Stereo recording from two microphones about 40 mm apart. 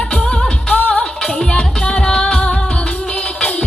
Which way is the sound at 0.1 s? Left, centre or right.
Centre.